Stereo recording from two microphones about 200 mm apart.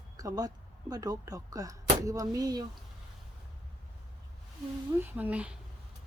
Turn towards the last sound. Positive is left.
turn(degrees=-5)  # may be behind; listen again after turning